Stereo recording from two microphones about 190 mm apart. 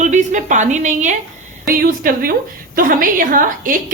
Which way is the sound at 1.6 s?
50° right (ahead or behind).